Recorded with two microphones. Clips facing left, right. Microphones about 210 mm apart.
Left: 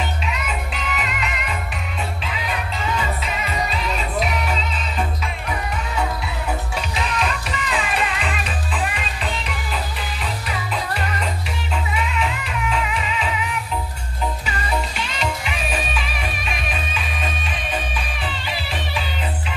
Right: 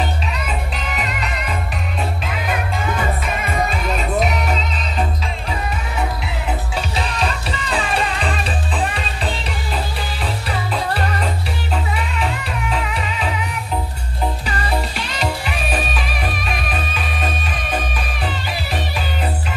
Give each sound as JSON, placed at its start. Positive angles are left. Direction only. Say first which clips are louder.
{"t": 0.3, "sound": "music", "louder": "right 2 dB", "side_deg": -40}
{"t": 2.2, "sound": "music", "louder": "right 4 dB", "side_deg": -50}
{"t": 7.0, "sound": "music", "louder": "even", "side_deg": -35}
{"t": 10.5, "sound": "music", "louder": "right 5 dB", "side_deg": -35}